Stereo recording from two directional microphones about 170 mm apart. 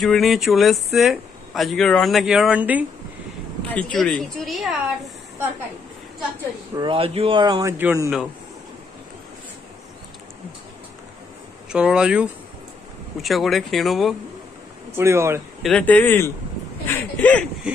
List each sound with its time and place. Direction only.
0.0 s speech: centre (ahead or behind)
3.6 s speech: 5° left (ahead or behind)
6.7 s speech: 30° right (ahead or behind)
7.7 s speech: 10° right (ahead or behind)
11.7 s speech: 5° right (ahead or behind)
15.0 s speech: 15° right (ahead or behind)
15.6 s speech: 5° left (ahead or behind)